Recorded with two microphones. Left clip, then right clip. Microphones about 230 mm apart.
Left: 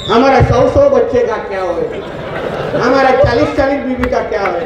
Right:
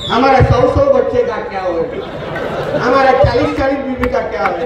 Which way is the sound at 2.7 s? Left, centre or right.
Right.